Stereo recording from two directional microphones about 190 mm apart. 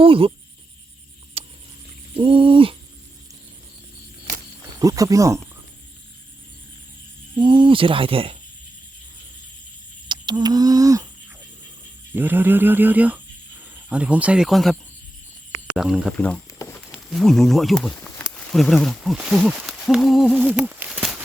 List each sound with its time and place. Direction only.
0.0 s speech: 30° right (ahead or behind)
1.4 s a sound: 30° right (ahead or behind)
2.1 s speech: 25° right (ahead or behind)
4.8 s speech: 20° right (ahead or behind)
7.3 s speech: 25° right (ahead or behind)
10.1 s a sound: 20° right (ahead or behind)
12.1 s speech: 10° right (ahead or behind)
16.1 s a sound: 10° left (ahead or behind)
16.9 s speech: centre (ahead or behind)